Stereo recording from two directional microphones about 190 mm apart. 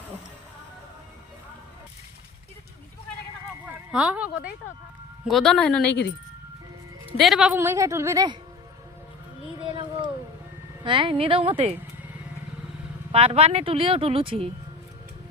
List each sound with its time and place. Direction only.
3.7 s a woman's voice: 5° right (ahead or behind)
7.2 s a woman's voice: centre (ahead or behind); by 8.4 s 20° right (ahead or behind)
9.6 s a sound: 25° right (ahead or behind)
10.8 s speech: 25° right (ahead or behind)
13.1 s speech: 30° right (ahead or behind)